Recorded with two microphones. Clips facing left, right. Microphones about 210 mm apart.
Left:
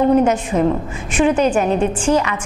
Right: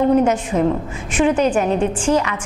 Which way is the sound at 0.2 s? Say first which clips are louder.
Left 1 dB; 25° left (ahead or behind).